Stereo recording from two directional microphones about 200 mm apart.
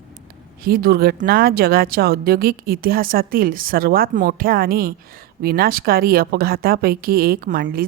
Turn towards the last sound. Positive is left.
turn(degrees=-45)  # may be behind; listen again after turning